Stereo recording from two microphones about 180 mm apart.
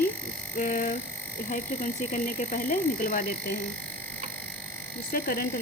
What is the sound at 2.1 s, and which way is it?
Frog, 45° left (ahead or behind).